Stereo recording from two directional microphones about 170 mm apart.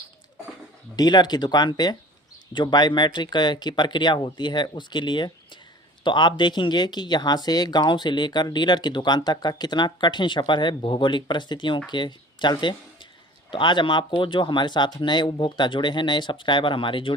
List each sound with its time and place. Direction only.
0.9 s speech: 25° left (ahead or behind)